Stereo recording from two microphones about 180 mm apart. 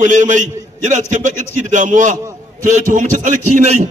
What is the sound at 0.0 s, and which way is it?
A man's voice, 45° right (ahead or behind).